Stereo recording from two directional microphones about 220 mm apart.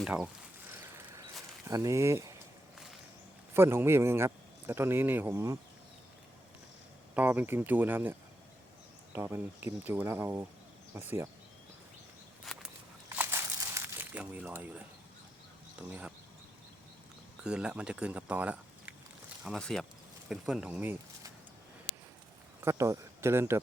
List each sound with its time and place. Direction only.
0.0 s speech: centre (ahead or behind)
0.7 s a sound: 10° right (ahead or behind)
3.5 s speech: 10° right (ahead or behind)
7.1 s speech: 5° right (ahead or behind)
9.1 s speech: 10° right (ahead or behind)
12.5 s a sound: 5° right (ahead or behind)
15.9 s speech: 5° right (ahead or behind)
17.4 s speech: 5° right (ahead or behind)
22.6 s speech: 15° right (ahead or behind)